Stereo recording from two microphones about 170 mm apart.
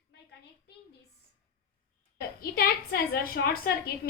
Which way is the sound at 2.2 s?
60° left (ahead or behind).